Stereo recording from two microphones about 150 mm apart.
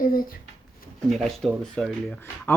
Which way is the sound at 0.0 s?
70° left (ahead or behind).